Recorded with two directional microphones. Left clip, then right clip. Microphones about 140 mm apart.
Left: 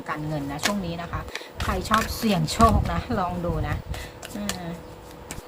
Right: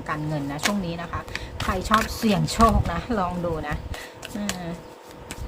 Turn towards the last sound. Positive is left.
turn(degrees=-15)  # may be behind; listen again after turning